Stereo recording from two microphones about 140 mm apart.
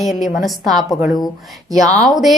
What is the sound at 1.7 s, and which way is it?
Speech, 25° right (ahead or behind).